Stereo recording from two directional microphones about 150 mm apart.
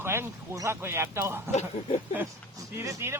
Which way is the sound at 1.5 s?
50° left (ahead or behind).